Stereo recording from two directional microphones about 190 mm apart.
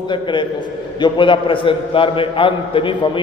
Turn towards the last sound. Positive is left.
turn(degrees=25)  # may be behind; listen again after turning